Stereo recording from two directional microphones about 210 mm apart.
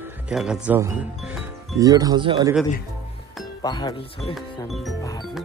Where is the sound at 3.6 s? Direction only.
20° left (ahead or behind).